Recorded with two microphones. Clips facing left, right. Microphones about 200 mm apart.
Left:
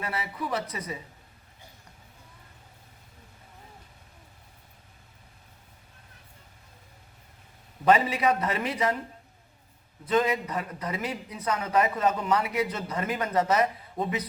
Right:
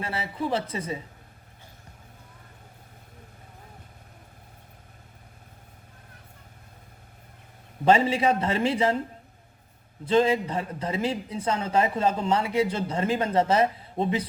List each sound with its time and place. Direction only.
0.0 s a man's voice: 30° right (ahead or behind)
7.9 s a man's voice: 25° right (ahead or behind)
10.1 s a man's voice: 30° right (ahead or behind)